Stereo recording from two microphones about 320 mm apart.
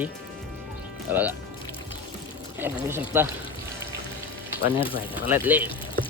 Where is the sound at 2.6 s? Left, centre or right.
Centre.